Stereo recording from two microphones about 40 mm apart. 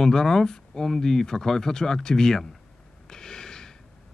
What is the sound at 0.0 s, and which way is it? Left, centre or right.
Speech, centre.